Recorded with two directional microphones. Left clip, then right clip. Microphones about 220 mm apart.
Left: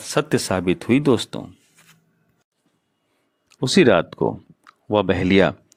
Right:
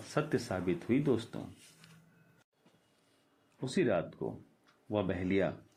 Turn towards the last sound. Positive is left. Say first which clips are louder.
# left 16 dB
turn(degrees=45)  # may be behind; listen again after turning